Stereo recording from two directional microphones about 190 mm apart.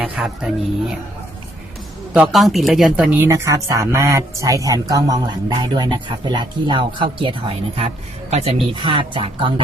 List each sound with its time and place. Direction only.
0.0 s music: 5° right (ahead or behind)
2.1 s speech: centre (ahead or behind); by 9.5 s 30° right (ahead or behind)